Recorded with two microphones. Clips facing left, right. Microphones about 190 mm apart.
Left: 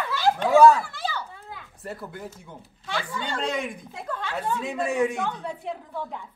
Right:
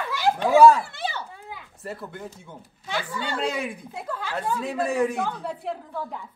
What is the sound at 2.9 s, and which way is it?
A woman's voice, 10° right (ahead or behind).